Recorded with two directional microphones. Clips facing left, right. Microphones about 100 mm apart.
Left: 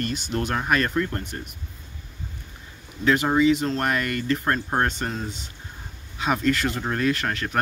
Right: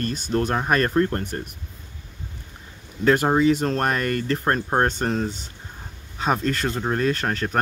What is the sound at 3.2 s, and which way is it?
Speech, 40° right (ahead or behind).